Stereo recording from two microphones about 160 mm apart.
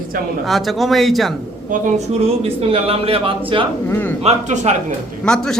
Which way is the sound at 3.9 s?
15° left (ahead or behind).